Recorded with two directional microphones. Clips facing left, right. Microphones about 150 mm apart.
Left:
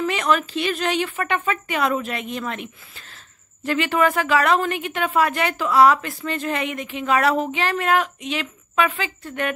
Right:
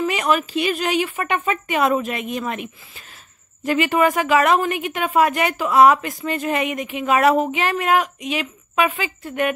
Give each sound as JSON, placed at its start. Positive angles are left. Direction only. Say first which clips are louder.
{"t": 0.0, "sound": "a woman's voice", "louder": "right 1 dB", "side_deg": -10}